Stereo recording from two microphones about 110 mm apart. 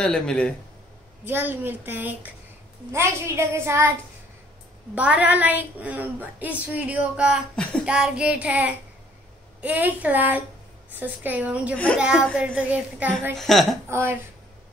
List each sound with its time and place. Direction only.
0.0 s speech: 5° left (ahead or behind)
1.2 s a woman's voice: 20° right (ahead or behind)
4.9 s a woman's voice: 15° right (ahead or behind)
7.5 s speech: 10° left (ahead or behind)
7.8 s a woman's voice: 10° right (ahead or behind)
11.7 s speech: 15° left (ahead or behind)
12.0 s a woman's voice: 10° right (ahead or behind)
13.4 s a woman's voice: 5° left (ahead or behind)
13.8 s a woman's voice: 20° right (ahead or behind)